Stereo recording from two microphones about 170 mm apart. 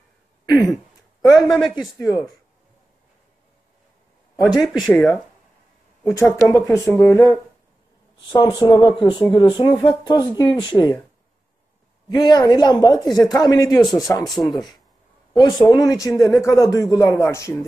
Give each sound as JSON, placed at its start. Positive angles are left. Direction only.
{"t": 0.5, "sound": "a man's voice", "side_deg": 0}
{"t": 2.0, "sound": "speech", "side_deg": 15}
{"t": 4.5, "sound": "speech", "side_deg": 25}
{"t": 6.0, "sound": "speech", "side_deg": 15}
{"t": 12.1, "sound": "speech", "side_deg": 25}
{"t": 14.2, "sound": "a man's voice", "side_deg": 0}
{"t": 15.3, "sound": "speech", "side_deg": 25}